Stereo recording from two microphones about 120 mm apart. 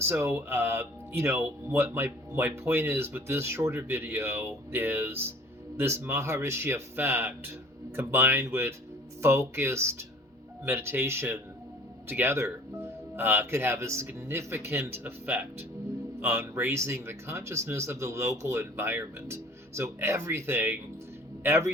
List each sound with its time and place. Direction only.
0.0 s speech: 20° right (ahead or behind)